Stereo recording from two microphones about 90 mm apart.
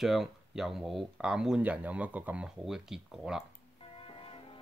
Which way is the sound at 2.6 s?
5° right (ahead or behind).